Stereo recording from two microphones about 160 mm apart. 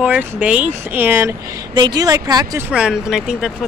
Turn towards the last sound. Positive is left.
turn(degrees=-5)  # may be behind; listen again after turning